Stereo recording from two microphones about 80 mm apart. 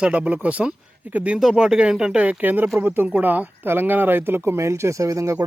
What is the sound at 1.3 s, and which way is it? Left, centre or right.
Speech, centre.